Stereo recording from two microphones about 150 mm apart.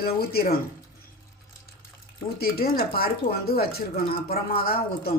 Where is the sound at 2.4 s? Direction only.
85° left.